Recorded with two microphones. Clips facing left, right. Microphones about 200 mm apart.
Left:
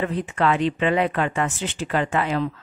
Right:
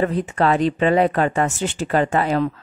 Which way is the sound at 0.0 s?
40° right (ahead or behind).